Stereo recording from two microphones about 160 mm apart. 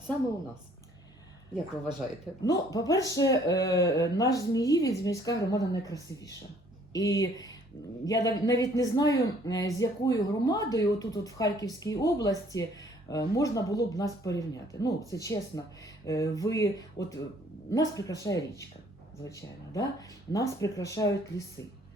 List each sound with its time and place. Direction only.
2.4 s speech: 20° left (ahead or behind)